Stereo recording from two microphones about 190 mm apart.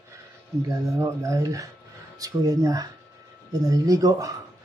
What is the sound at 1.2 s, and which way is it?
Speech, 15° right (ahead or behind).